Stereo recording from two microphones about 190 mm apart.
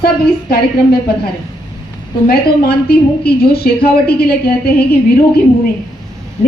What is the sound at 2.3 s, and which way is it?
A woman's voice, 55° left (ahead or behind).